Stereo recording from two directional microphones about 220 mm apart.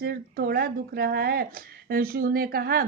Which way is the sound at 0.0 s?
45° right (ahead or behind).